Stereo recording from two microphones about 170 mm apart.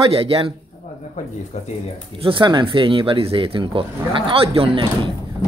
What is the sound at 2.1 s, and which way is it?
Speech, 30° right (ahead or behind).